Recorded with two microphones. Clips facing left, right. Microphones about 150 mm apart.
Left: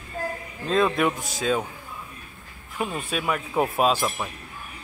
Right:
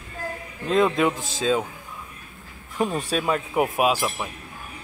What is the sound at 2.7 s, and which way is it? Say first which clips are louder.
Speech: right 4 dB; 35° right (ahead or behind).